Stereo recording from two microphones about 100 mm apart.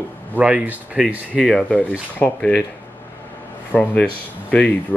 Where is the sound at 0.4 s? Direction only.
15° right (ahead or behind).